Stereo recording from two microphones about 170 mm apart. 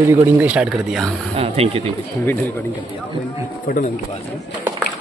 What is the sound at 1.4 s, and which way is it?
Speech, 35° right (ahead or behind).